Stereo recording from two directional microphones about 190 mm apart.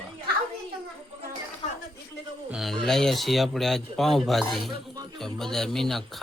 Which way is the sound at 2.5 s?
Centre (ahead or behind).